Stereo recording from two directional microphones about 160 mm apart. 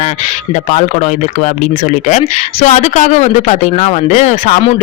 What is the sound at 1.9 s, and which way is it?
A woman's voice, 45° left (ahead or behind).